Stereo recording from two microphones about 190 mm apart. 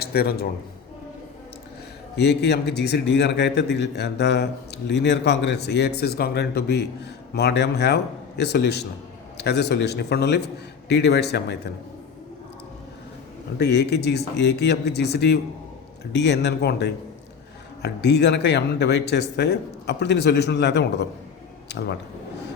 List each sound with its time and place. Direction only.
0.0 s a man's voice: 55° left (ahead or behind)
2.1 s a man's voice: 60° left (ahead or behind)
13.6 s a man's voice: 60° left (ahead or behind)